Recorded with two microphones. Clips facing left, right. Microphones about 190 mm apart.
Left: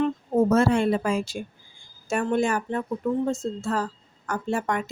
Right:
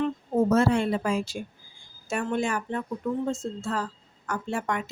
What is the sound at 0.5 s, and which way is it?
A woman's voice, 50° left (ahead or behind).